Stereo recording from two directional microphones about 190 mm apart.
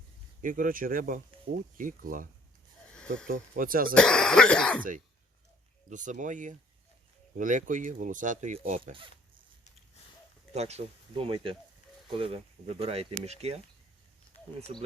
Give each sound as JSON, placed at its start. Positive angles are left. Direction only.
{"t": 0.4, "sound": "speech", "side_deg": -45}
{"t": 2.9, "sound": "a sound", "side_deg": 5}
{"t": 3.2, "sound": "speech", "side_deg": -45}
{"t": 3.9, "sound": "speech", "side_deg": 5}
{"t": 4.8, "sound": "speech", "side_deg": -45}
{"t": 10.5, "sound": "speech", "side_deg": -35}
{"t": 14.3, "sound": "a sound", "side_deg": 50}